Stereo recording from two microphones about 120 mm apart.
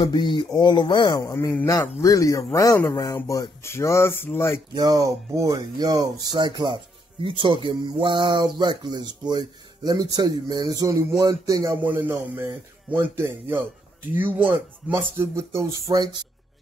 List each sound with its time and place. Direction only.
0.0 s speech: 35° left (ahead or behind)
1.3 s speech: 20° left (ahead or behind)
4.7 s speech: 35° right (ahead or behind)
11.8 s a man's voice: 15° right (ahead or behind)
15.9 s speech: 40° right (ahead or behind)